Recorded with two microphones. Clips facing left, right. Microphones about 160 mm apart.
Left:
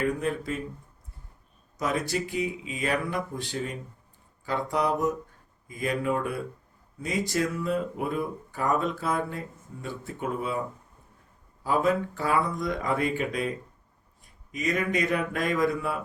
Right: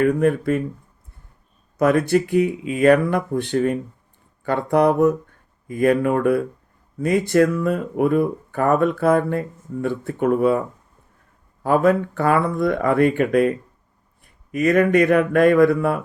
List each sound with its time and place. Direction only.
0.0 s speech: 60° right (ahead or behind)
1.8 s speech: 60° right (ahead or behind)
11.6 s speech: 60° right (ahead or behind)